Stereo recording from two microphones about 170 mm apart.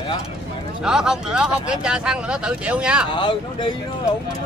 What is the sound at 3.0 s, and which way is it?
Speech, 30° left (ahead or behind).